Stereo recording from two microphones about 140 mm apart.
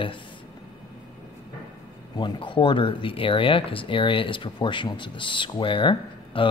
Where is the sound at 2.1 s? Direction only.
35° left (ahead or behind).